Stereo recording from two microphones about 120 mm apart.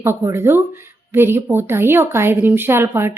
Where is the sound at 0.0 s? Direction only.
20° right (ahead or behind).